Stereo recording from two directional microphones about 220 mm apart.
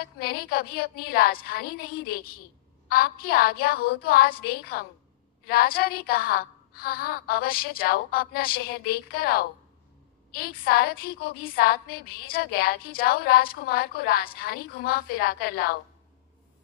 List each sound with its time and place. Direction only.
0.2 s a woman's voice: 45° left (ahead or behind)